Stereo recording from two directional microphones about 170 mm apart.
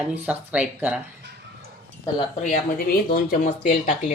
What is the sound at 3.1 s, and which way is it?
Speech, 60° left (ahead or behind).